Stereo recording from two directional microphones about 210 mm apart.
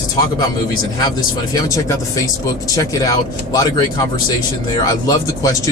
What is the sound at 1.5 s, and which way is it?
Speech, 15° left (ahead or behind).